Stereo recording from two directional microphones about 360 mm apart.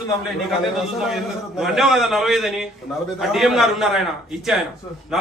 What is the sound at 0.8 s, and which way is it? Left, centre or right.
A man's voice, centre.